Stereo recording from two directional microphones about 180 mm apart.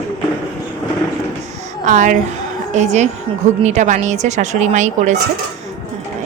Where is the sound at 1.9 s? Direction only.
45° right (ahead or behind).